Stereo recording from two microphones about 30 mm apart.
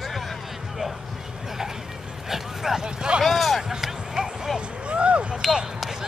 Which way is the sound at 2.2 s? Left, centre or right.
Centre.